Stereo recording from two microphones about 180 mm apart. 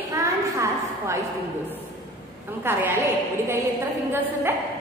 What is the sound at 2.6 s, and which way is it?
Speech, 10° right (ahead or behind).